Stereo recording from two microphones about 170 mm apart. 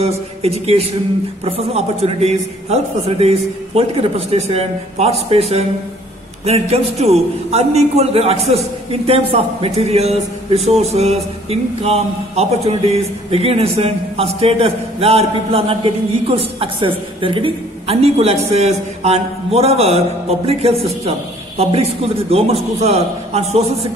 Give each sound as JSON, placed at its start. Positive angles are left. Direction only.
{"t": 0.0, "sound": "a man's voice", "side_deg": -40}